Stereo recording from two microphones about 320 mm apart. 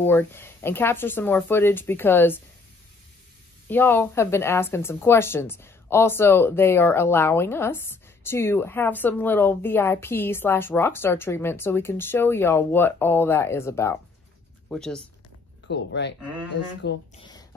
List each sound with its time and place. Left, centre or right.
0.0 s speech: centre
3.6 s speech: centre
15.6 s speech: left
17.2 s a sound: centre